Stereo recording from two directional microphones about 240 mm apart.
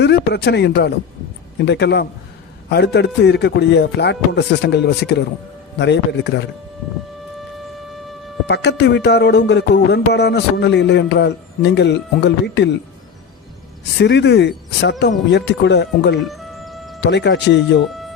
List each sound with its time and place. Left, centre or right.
0.0 s speech: left
1.6 s music: left
8.4 s music: left
14.0 s music: left
16.3 s music: centre
17.0 s music: left